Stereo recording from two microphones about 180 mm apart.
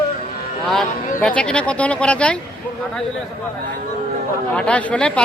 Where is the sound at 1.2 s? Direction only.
5° left (ahead or behind).